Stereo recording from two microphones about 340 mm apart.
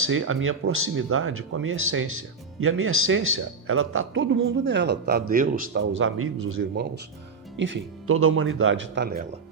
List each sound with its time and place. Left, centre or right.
0.0 s a man's voice: right